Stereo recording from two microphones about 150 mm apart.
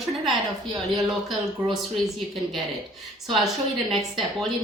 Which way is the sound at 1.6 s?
25° right (ahead or behind).